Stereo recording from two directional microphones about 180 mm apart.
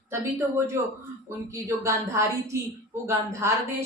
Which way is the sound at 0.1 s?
15° right (ahead or behind).